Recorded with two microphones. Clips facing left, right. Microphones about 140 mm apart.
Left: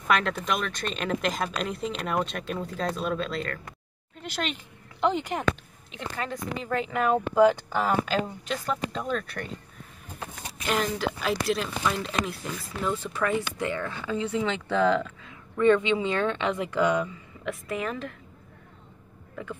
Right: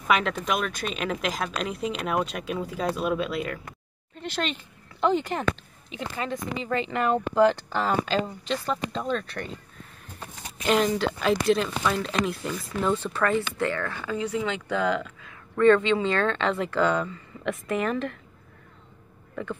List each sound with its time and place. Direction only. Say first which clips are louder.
0.1 s speech: right 1 dB; centre (ahead or behind)
4.2 s a woman's voice: right 2 dB; 10° left (ahead or behind)
5.9 s speech: right 2 dB; centre (ahead or behind)
10.7 s speech: right 4 dB; 5° left (ahead or behind); by 15.3 s 30° left (ahead or behind)
15.6 s a woman's voice: right 2 dB; 15° left (ahead or behind)
17.5 s speech: right 4 dB; centre (ahead or behind)